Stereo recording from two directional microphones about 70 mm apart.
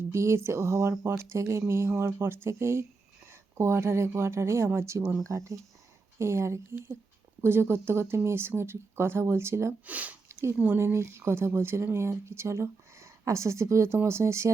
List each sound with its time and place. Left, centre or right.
0.1 s speech: right
9.8 s speech: right
10.8 s speech: right